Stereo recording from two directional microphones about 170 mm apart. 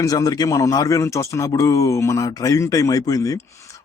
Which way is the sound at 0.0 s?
20° left (ahead or behind).